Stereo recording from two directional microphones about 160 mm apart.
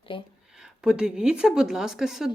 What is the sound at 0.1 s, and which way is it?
Speech, 30° left (ahead or behind).